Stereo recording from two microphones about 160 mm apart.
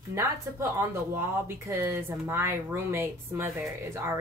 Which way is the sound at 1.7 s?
15° right (ahead or behind).